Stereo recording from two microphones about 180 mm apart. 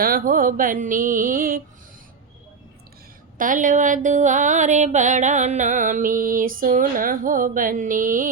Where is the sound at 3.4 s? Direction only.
45° right (ahead or behind).